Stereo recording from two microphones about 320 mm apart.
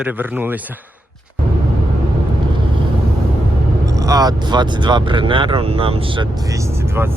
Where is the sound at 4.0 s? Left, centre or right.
Centre.